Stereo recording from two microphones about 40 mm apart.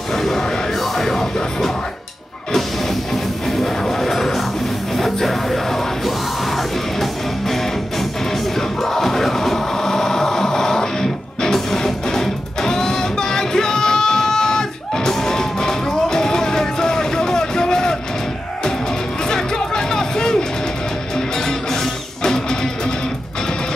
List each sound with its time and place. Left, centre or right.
0.1 s music: centre
3.9 s music: centre
19.2 s music: centre
22.2 s music: centre